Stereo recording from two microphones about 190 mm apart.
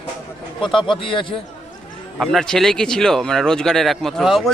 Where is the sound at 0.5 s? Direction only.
25° left (ahead or behind).